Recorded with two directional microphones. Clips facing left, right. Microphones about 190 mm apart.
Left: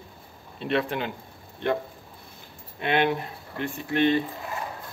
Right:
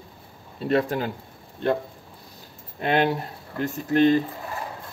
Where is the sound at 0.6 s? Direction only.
40° right (ahead or behind).